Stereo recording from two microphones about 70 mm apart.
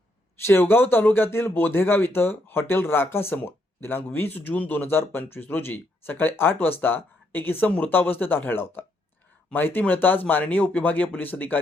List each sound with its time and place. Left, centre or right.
0.4 s speech: left
7.7 s speech: centre
7.9 s speech: left